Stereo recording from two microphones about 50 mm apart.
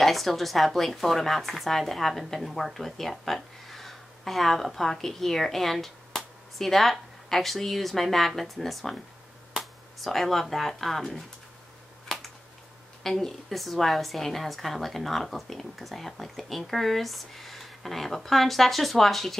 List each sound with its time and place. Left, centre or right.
0.0 s speech: centre
12.1 s a sound: centre
13.0 s speech: centre